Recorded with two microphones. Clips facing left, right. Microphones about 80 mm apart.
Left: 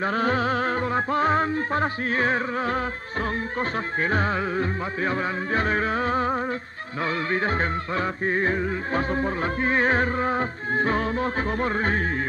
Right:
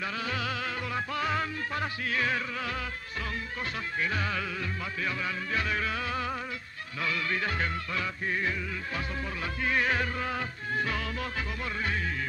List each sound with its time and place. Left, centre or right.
0.0 s music: left